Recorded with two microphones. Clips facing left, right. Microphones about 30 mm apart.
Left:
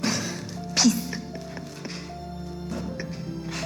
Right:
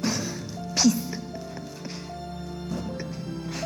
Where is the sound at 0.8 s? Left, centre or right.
Centre.